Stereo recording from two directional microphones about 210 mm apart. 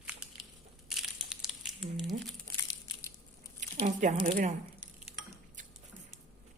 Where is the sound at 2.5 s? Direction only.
15° left (ahead or behind).